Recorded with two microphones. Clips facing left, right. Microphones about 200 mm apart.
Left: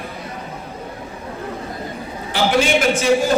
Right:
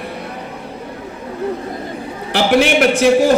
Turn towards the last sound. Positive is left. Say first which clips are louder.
# right 5 dB
turn(degrees=-65)  # may be behind; listen again after turning